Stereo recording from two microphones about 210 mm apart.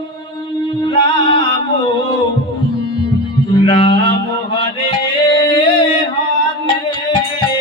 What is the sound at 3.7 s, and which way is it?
Music, 25° left (ahead or behind).